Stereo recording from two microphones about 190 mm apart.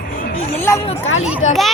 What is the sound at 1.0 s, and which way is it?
Speech, 90° left.